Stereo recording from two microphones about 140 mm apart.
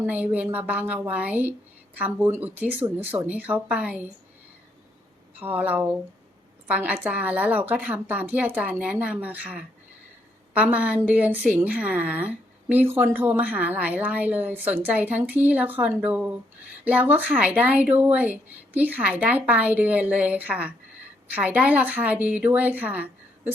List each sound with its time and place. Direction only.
0.0 s a woman's voice: 10° right (ahead or behind)
5.4 s a woman's voice: 10° right (ahead or behind)